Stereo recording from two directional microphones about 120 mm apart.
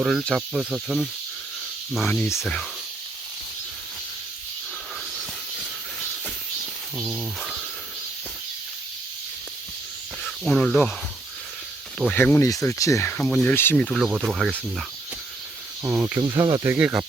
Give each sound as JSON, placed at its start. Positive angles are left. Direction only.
{"t": 0.0, "sound": "speech", "side_deg": -10}
{"t": 5.1, "sound": "a sound", "side_deg": -10}
{"t": 6.9, "sound": "speech", "side_deg": -5}
{"t": 10.2, "sound": "speech", "side_deg": 5}
{"t": 12.1, "sound": "speech", "side_deg": 15}
{"t": 13.1, "sound": "speech", "side_deg": 10}
{"t": 13.7, "sound": "speech", "side_deg": 0}
{"t": 15.8, "sound": "speech", "side_deg": -25}
{"t": 16.7, "sound": "speech", "side_deg": -10}